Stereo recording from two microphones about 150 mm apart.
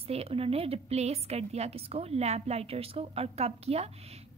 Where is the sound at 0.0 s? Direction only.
40° right (ahead or behind).